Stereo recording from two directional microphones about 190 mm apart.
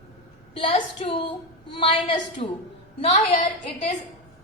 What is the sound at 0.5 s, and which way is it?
A woman's voice, 30° left (ahead or behind).